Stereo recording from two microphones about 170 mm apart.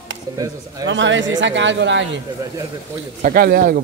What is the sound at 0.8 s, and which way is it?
Speech, 90° right.